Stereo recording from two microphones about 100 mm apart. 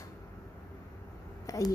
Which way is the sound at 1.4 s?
35° left (ahead or behind).